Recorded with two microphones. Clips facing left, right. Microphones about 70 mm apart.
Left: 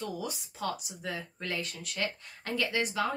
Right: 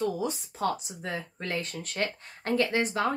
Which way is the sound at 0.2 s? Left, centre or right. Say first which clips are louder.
Right 6 dB; right.